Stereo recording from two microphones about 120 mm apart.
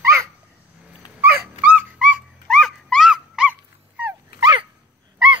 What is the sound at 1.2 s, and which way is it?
Dog, 15° right (ahead or behind).